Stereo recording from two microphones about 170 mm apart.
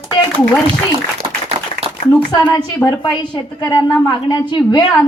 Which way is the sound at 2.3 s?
25° left (ahead or behind).